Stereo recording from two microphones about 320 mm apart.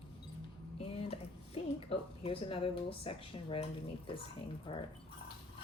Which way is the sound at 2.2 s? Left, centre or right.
Centre.